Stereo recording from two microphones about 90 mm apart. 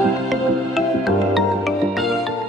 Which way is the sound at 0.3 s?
Centre (ahead or behind).